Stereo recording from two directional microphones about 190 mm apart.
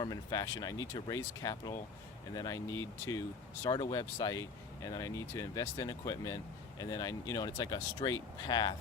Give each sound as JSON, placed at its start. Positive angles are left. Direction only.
{"t": 0.0, "sound": "speech", "side_deg": 20}